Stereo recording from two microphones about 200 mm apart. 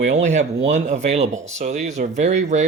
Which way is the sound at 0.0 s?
35° right (ahead or behind).